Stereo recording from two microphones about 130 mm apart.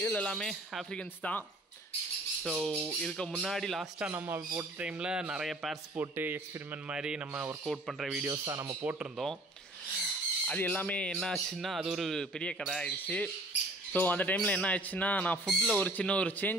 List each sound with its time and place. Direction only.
0.0 s speech: 10° left (ahead or behind)
2.6 s music: centre (ahead or behind)
4.0 s speech: 15° right (ahead or behind)
5.9 s speech: 15° right (ahead or behind)
7.6 s music: centre (ahead or behind)
8.3 s speech: 25° right (ahead or behind)
8.8 s speech: 10° right (ahead or behind)
10.0 s speech: 10° left (ahead or behind)